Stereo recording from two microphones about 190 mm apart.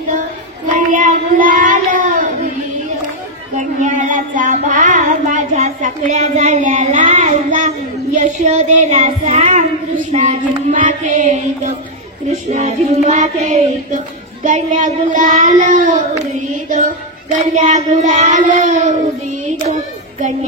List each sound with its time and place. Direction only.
0.7 s child singing: 40° right (ahead or behind)
3.5 s child singing: 40° right (ahead or behind)